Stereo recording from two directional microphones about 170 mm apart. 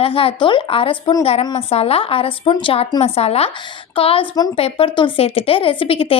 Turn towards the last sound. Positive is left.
turn(degrees=30)  # may be behind; listen again after turning